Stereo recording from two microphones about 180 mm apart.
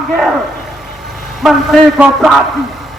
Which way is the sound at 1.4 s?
Centre (ahead or behind).